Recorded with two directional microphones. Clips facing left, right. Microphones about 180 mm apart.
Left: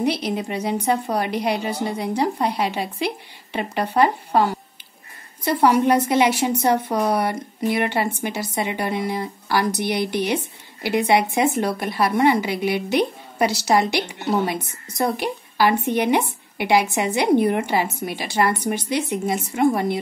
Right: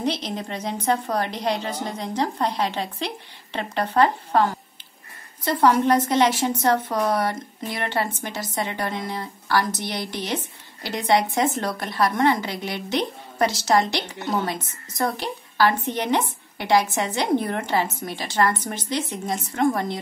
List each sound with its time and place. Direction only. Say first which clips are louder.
0.0 s a woman's voice: left 4 dB; 10° left (ahead or behind)